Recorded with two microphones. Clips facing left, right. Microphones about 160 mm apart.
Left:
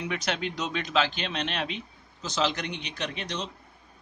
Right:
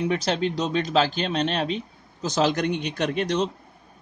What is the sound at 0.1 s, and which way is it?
Speech, 35° right (ahead or behind).